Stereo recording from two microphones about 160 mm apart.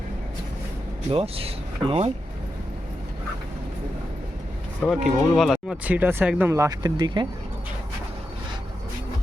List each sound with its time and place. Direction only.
1.1 s speech: 35° right (ahead or behind)
4.8 s speech: centre (ahead or behind); by 7.3 s 30° right (ahead or behind)